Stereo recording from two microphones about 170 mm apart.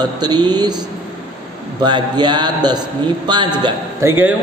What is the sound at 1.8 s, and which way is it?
A man's voice, 25° right (ahead or behind).